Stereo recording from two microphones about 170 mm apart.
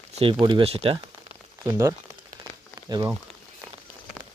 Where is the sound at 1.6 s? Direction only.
15° right (ahead or behind).